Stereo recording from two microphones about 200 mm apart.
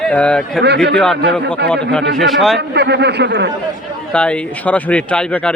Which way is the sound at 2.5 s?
55° right (ahead or behind).